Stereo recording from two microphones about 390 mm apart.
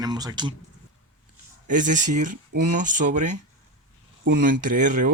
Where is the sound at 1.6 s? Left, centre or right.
Centre.